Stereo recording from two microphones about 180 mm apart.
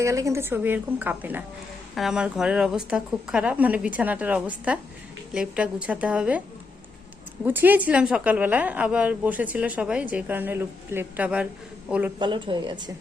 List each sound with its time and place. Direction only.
0.0 s a woman's voice: 15° right (ahead or behind)
7.4 s a woman's voice: 10° right (ahead or behind)
12.2 s a woman's voice: 25° right (ahead or behind)